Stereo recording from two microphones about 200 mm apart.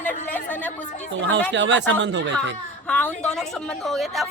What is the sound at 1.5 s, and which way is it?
Speech, 65° right (ahead or behind).